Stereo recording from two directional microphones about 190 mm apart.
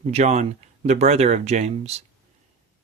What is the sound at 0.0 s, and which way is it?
Speech, 35° right (ahead or behind).